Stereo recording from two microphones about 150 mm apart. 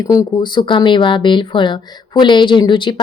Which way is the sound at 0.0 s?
25° left (ahead or behind).